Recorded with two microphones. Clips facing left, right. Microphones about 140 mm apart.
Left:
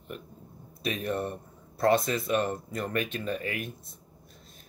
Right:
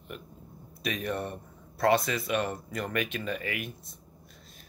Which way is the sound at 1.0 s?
45° left (ahead or behind).